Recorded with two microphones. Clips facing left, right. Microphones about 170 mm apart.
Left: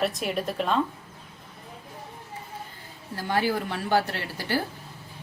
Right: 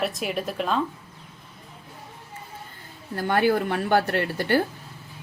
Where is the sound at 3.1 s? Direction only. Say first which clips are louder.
Right 5 dB; 55° right (ahead or behind).